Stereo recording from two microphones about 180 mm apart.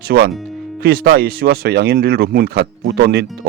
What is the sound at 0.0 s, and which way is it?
Speech, 60° right (ahead or behind).